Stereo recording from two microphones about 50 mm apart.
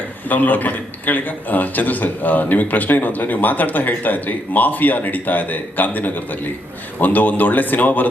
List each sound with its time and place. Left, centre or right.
0.3 s a man's voice: left